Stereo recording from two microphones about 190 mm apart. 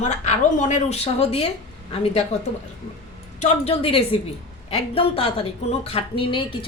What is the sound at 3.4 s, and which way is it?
A woman's voice, 30° left (ahead or behind).